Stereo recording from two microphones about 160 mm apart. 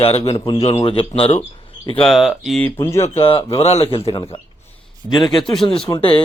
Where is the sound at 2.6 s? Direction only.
15° left (ahead or behind).